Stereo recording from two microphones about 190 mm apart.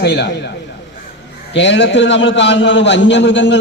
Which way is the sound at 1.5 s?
65° left (ahead or behind).